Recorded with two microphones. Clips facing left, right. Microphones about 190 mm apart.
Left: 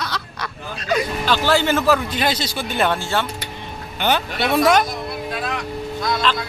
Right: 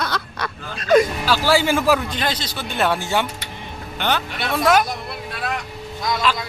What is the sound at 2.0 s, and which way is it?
Speech, 10° left (ahead or behind).